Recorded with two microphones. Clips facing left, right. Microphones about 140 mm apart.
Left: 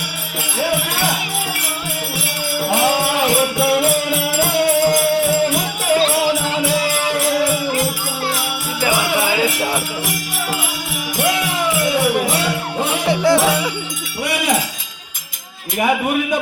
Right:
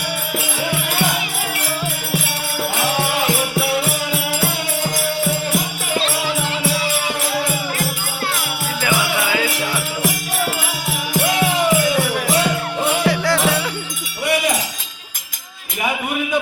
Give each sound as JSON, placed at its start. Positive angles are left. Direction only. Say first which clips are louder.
{"t": 13.1, "sound": "music", "louder": "left 7 dB", "side_deg": 20}